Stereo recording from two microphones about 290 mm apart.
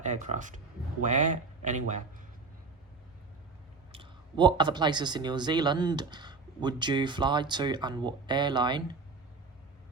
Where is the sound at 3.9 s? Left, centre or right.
Centre.